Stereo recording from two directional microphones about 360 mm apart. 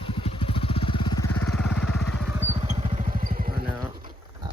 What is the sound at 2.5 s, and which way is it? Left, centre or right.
Vehicle, centre.